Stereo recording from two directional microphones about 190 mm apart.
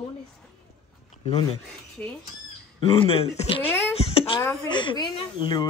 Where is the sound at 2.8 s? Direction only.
30° left (ahead or behind).